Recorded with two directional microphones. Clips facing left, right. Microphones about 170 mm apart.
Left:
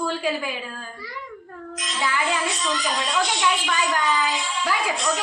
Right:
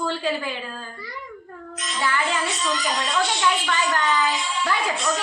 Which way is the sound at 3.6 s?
10° left (ahead or behind).